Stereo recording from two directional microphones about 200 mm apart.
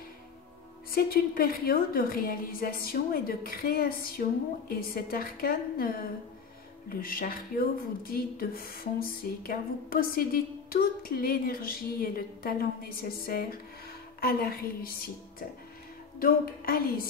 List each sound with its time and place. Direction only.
0.9 s speech: 45° left (ahead or behind)
16.2 s speech: 50° left (ahead or behind)